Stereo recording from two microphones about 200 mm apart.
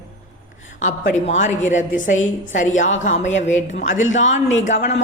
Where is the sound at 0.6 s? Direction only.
40° left (ahead or behind).